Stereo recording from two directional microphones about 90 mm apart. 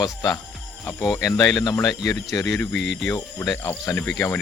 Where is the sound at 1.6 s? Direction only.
45° left (ahead or behind).